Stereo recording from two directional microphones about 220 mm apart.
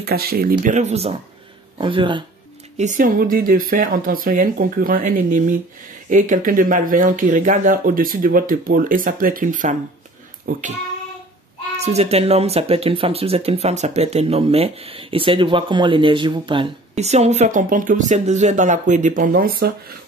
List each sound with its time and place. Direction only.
0.0 s speech: 45° right (ahead or behind); by 2.2 s 20° right (ahead or behind)
2.8 s speech: 35° right (ahead or behind)
11.8 s speech: 30° right (ahead or behind)